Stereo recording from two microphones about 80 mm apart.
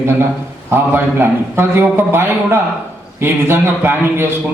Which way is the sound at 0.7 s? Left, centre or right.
Right.